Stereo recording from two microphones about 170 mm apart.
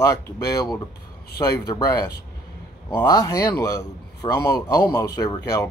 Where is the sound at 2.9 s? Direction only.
20° left (ahead or behind).